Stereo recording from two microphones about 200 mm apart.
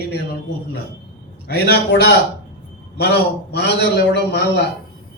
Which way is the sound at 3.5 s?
55° left (ahead or behind).